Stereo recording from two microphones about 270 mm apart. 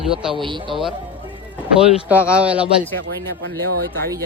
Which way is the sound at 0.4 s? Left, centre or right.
Centre.